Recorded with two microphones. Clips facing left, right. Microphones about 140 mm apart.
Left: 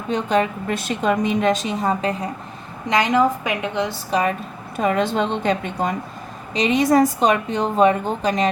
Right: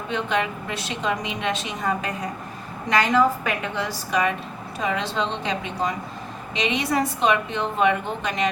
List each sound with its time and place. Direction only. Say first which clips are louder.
0.1 s a woman's voice: left 6 dB; 40° left (ahead or behind)
1.8 s a woman's voice: left 5 dB; 30° left (ahead or behind)
2.9 s a woman's voice: left 2 dB; 20° left (ahead or behind)
4.1 s a woman's voice: left 2 dB; 35° left (ahead or behind)
4.8 s a woman's voice: left 6 dB; 50° left (ahead or behind)